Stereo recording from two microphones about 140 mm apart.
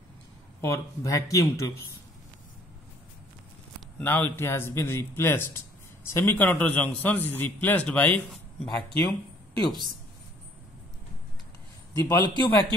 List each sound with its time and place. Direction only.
0.6 s speech: 20° left (ahead or behind)
4.0 s a man's voice: 15° left (ahead or behind)
11.9 s speech: 20° left (ahead or behind)